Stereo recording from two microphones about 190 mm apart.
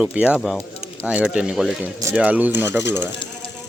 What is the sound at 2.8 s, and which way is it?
Speech, 65° left (ahead or behind).